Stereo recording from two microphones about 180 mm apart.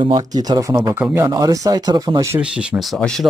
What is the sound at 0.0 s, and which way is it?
Speech, 20° right (ahead or behind).